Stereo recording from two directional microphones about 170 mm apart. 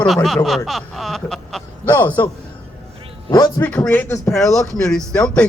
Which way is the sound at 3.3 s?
25° left (ahead or behind).